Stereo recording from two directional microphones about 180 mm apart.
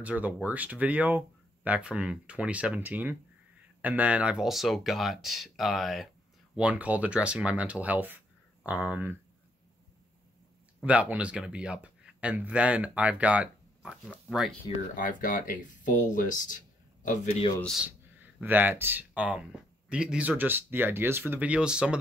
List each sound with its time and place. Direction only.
0.0 s speech: 10° right (ahead or behind)
10.8 s speech: 5° right (ahead or behind)
15.0 s speech: 45° left (ahead or behind)
17.6 s speech: 5° left (ahead or behind)
17.8 s speech: 10° right (ahead or behind)